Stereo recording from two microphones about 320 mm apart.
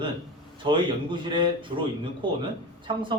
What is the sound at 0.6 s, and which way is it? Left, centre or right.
Speech, centre.